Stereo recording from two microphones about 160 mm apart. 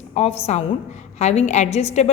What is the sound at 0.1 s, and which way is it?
A woman's voice, 40° left (ahead or behind).